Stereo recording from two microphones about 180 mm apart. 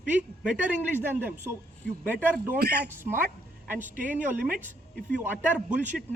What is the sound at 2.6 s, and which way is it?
Speech, 60° right (ahead or behind).